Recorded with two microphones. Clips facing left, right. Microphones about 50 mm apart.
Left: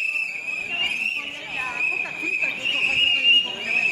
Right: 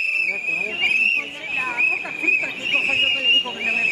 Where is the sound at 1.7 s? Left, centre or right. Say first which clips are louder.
Right 2 dB; right.